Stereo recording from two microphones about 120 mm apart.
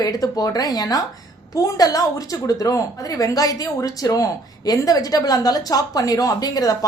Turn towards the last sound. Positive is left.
turn(degrees=30)  # may be behind; listen again after turning